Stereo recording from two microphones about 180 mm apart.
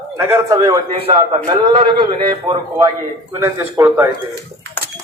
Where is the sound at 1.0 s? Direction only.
30° right (ahead or behind).